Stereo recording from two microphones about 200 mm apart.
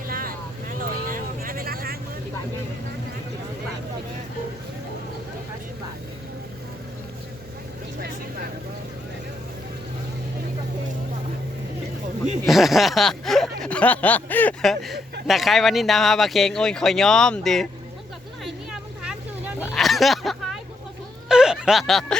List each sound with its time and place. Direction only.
0.1 s vehicle: 45° right (ahead or behind)
12.4 s speech: centre (ahead or behind)
18.4 s vehicle: 5° right (ahead or behind)
19.5 s a sound: centre (ahead or behind)
21.2 s snicker: 5° right (ahead or behind)